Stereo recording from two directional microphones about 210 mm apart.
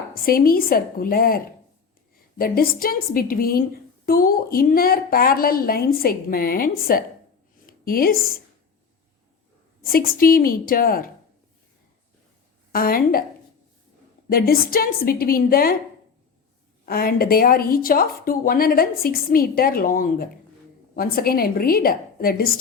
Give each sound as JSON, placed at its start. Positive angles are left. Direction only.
{"t": 0.1, "sound": "speech", "side_deg": 45}
{"t": 2.4, "sound": "a woman's voice", "side_deg": 45}
{"t": 9.8, "sound": "speech", "side_deg": 45}
{"t": 12.7, "sound": "speech", "side_deg": 45}
{"t": 14.3, "sound": "speech", "side_deg": 45}
{"t": 16.8, "sound": "speech", "side_deg": 45}